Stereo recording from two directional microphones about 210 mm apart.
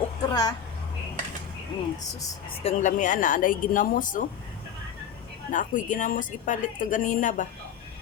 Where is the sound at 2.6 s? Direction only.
30° left (ahead or behind).